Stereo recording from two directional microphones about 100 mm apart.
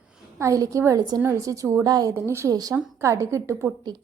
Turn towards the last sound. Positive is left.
turn(degrees=-30)  # may be behind; listen again after turning